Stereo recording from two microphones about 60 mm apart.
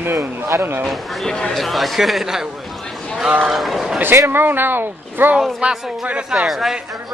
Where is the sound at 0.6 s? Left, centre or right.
Right.